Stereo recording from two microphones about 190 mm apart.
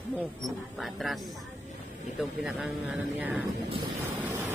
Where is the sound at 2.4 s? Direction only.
5° right (ahead or behind).